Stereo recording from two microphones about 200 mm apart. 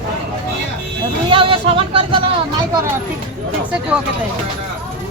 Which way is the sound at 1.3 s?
25° right (ahead or behind).